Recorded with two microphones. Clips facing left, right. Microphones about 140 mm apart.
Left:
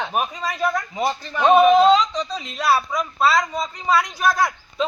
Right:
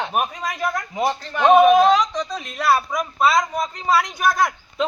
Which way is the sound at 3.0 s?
20° right (ahead or behind).